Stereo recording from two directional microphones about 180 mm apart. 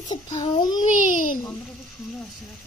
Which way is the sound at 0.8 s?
45° left (ahead or behind).